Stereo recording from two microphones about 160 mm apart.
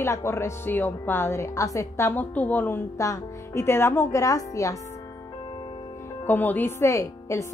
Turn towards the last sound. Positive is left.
turn(degrees=15)  # may be behind; listen again after turning